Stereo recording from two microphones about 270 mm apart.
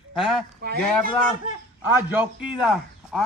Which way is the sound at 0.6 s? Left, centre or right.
Right.